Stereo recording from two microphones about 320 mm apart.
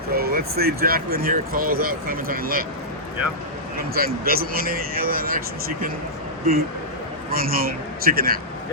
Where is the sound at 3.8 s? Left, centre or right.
Right.